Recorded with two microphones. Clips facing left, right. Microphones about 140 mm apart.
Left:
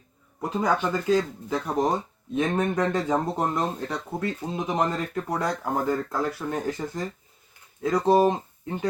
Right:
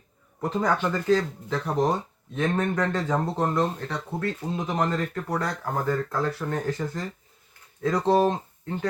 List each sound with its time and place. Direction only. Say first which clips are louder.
0.6 s speech: left 1 dB; 10° left (ahead or behind)